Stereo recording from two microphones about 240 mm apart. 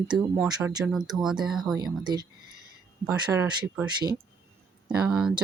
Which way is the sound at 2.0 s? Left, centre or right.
Centre.